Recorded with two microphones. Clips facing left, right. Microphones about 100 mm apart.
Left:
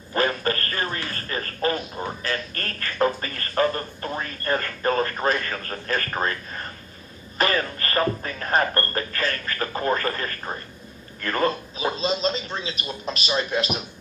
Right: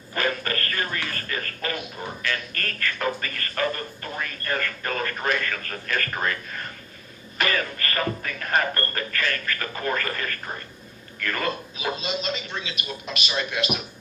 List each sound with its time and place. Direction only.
0.1 s radio: 30° left (ahead or behind)
7.3 s a man's voice: 30° left (ahead or behind)